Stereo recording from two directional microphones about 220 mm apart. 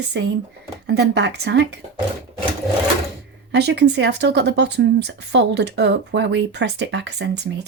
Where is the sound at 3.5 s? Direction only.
50° right (ahead or behind).